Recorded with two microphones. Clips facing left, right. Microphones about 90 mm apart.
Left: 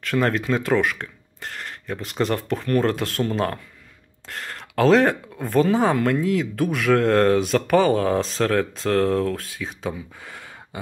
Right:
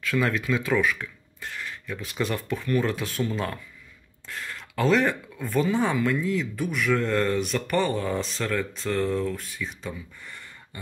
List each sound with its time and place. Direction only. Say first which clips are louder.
0.1 s speech: left 4 dB; 55° left (ahead or behind)
6.2 s speech: left 5 dB; 85° left